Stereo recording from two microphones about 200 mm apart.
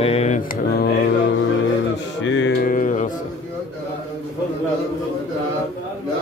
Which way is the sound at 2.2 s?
65° left (ahead or behind).